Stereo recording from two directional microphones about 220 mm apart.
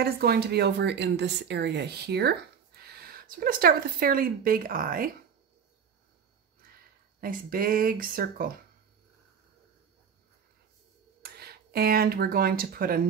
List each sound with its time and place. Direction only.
0.0 s speech: 45° right (ahead or behind)
7.2 s speech: 40° right (ahead or behind)
11.2 s speech: 45° right (ahead or behind)